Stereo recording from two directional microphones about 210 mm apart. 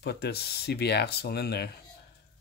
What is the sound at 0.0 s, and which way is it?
Speech, 50° left (ahead or behind).